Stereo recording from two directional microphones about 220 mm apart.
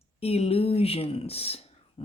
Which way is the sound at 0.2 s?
25° left (ahead or behind).